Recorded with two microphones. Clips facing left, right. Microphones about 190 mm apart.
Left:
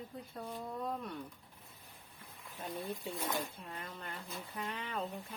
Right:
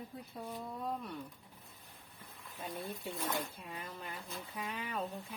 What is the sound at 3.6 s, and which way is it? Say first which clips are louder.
Speech: even; 5° right (ahead or behind).